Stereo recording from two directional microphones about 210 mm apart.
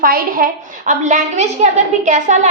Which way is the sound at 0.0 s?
45° right (ahead or behind).